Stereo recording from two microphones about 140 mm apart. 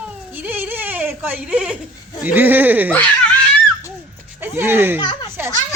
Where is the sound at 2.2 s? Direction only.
15° right (ahead or behind).